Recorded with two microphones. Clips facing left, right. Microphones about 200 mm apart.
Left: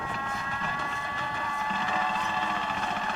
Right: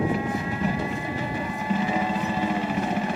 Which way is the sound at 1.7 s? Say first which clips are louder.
Right 8 dB; 10° right (ahead or behind).